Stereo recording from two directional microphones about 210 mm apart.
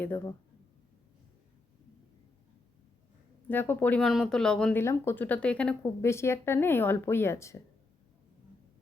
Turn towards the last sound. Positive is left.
turn(degrees=15)  # may be behind; listen again after turning